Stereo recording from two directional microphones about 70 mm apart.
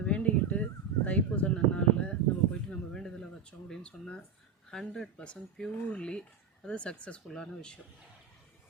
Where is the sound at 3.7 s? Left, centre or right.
Centre.